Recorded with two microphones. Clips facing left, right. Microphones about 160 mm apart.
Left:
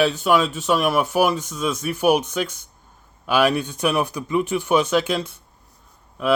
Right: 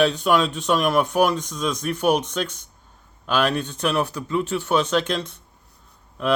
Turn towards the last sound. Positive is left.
turn(degrees=5)  # may be behind; listen again after turning